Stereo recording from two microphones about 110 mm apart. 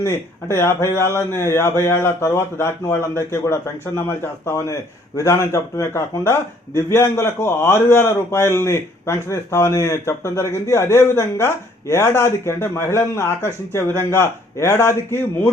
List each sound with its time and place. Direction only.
0.0 s a man's voice: 25° left (ahead or behind)